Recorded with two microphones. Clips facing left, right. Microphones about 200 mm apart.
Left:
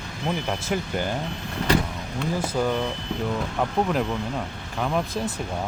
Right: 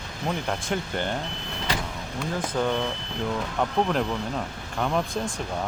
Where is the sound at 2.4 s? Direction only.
10° left (ahead or behind).